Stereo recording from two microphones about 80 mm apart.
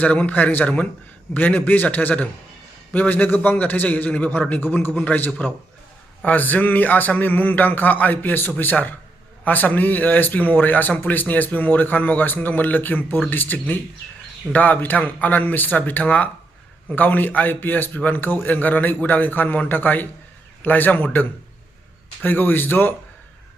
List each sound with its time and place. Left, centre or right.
0.0 s speech: centre